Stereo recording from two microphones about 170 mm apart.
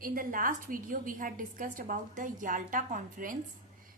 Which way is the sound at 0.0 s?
55° right (ahead or behind).